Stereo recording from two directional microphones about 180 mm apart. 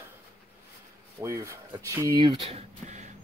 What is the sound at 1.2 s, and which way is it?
Speech, 15° right (ahead or behind).